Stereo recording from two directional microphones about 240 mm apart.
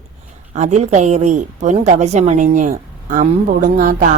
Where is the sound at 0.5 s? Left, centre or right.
Right.